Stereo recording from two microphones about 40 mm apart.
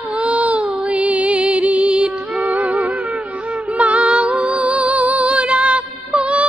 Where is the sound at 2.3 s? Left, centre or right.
Right.